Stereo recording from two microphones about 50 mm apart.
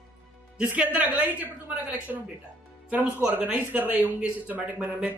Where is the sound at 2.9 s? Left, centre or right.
Right.